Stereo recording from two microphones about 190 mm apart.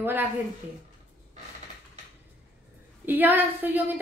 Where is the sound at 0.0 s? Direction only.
10° right (ahead or behind).